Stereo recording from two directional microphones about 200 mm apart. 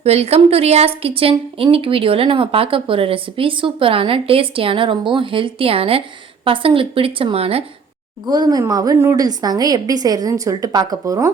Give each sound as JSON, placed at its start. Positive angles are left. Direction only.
{"t": 0.0, "sound": "speech", "side_deg": -30}